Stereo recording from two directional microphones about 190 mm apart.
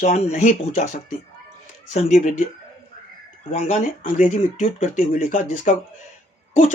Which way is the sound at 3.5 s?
35° left (ahead or behind).